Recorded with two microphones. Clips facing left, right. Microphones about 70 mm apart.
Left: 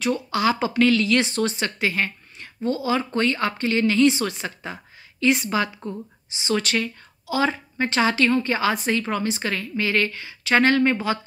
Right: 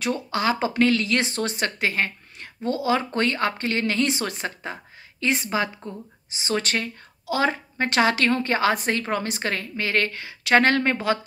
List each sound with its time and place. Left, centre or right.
0.0 s a woman's voice: right